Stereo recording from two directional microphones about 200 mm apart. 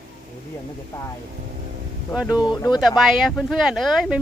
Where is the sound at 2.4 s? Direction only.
20° left (ahead or behind).